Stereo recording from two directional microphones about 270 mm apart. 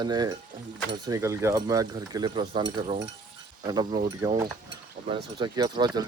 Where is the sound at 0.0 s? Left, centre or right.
Centre.